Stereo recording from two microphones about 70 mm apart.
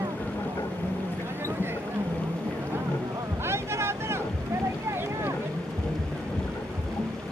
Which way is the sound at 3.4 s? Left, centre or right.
Right.